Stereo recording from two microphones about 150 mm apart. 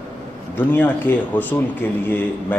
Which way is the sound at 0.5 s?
10° left (ahead or behind).